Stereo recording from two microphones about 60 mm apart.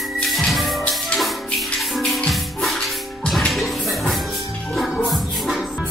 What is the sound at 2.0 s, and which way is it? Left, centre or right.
Music, centre.